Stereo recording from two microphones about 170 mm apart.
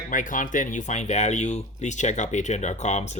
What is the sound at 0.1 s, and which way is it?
Speech, 50° left (ahead or behind).